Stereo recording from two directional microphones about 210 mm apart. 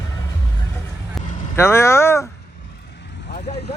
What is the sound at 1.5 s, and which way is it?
Vehicle, 10° left (ahead or behind).